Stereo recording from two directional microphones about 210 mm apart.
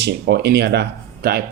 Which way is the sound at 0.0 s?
50° right (ahead or behind).